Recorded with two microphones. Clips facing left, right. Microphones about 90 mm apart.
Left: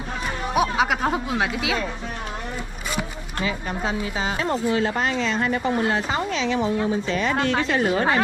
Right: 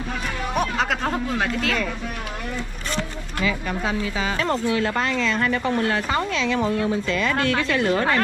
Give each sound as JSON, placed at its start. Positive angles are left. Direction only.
{"t": 0.6, "sound": "speech", "side_deg": 10}
{"t": 3.3, "sound": "speech", "side_deg": 30}
{"t": 7.1, "sound": "speech", "side_deg": 25}
{"t": 7.8, "sound": "speech", "side_deg": 15}